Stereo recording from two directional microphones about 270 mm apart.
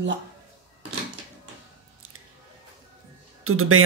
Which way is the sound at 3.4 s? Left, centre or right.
Right.